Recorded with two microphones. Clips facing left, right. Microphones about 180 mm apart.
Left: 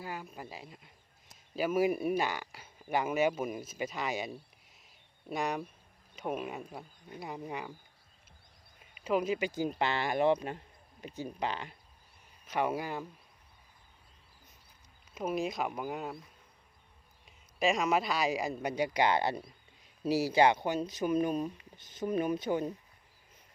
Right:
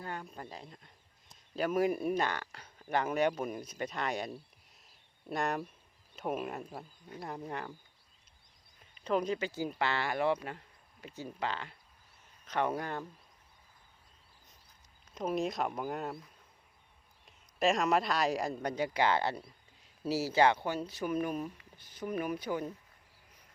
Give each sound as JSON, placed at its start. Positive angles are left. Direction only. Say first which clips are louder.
{"t": 0.0, "sound": "speech", "louder": "even", "side_deg": 5}
{"t": 9.0, "sound": "speech", "louder": "left 1 dB", "side_deg": 5}
{"t": 15.1, "sound": "speech", "louder": "even", "side_deg": 0}